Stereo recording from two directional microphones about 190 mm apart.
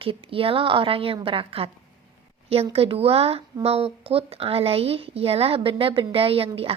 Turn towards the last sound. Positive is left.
turn(degrees=-30)  # may be behind; listen again after turning